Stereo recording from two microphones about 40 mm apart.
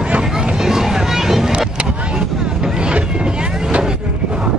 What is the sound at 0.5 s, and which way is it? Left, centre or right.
Boat, centre.